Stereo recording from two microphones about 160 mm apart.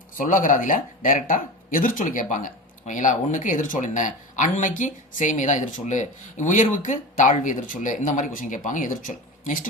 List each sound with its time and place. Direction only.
0.2 s speech: 55° left (ahead or behind)